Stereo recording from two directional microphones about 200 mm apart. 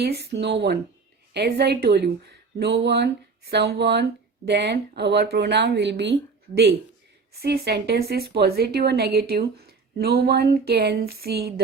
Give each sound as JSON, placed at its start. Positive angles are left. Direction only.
{"t": 0.0, "sound": "a woman's voice", "side_deg": -55}